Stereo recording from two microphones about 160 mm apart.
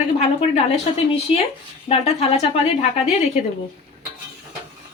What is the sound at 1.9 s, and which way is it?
Speech, 40° left (ahead or behind).